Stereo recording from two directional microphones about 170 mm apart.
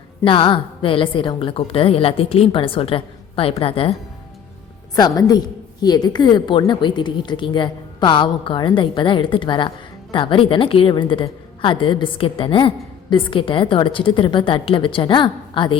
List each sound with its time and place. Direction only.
0.3 s a woman's voice: 30° left (ahead or behind)
4.9 s a woman's voice: 20° left (ahead or behind)